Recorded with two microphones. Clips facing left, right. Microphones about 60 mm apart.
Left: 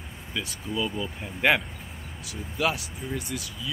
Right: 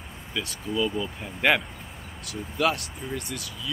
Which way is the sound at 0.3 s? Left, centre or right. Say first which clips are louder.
Right 2 dB; centre.